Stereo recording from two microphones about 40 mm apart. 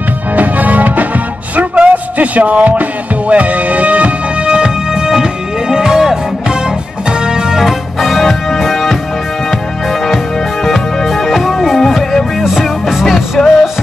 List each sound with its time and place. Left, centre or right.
0.4 s music: right
4.5 s music: right
7.6 s music: centre
10.0 s music: centre
12.4 s music: centre
13.0 s music: centre